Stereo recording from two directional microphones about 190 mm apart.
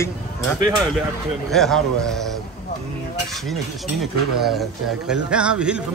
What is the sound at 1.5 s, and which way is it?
Speech, centre (ahead or behind).